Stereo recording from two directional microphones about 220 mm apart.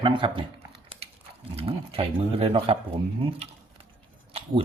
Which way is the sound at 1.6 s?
25° right (ahead or behind).